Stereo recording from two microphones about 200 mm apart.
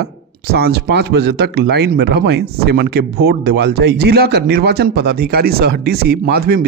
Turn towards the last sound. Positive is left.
turn(degrees=-50)  # may be behind; listen again after turning